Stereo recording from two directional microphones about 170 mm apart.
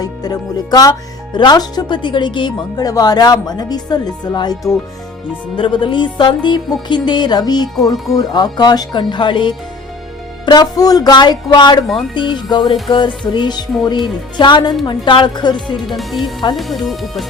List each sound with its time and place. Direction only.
0.0 s speech: 20° left (ahead or behind)
15.9 s speech: centre (ahead or behind)
16.2 s speech: 25° left (ahead or behind)
16.6 s speech: centre (ahead or behind)